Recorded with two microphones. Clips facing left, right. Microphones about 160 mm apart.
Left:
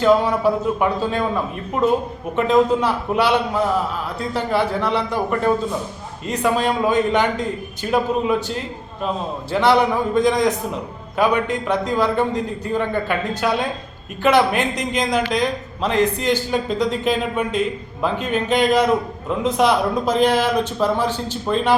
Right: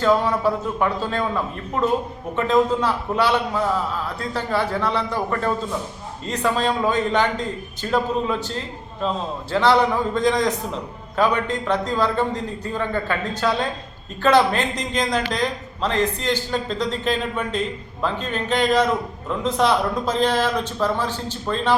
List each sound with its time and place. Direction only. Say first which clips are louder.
0.0 s speech: left 3 dB; 15° left (ahead or behind)
2.3 s speech: left 3 dB; 15° left (ahead or behind)